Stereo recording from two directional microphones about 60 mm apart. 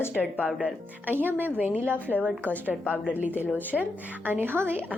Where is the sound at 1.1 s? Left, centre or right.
Right.